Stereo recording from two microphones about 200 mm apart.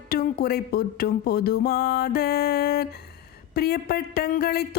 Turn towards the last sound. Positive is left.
turn(degrees=50)  # may be behind; listen again after turning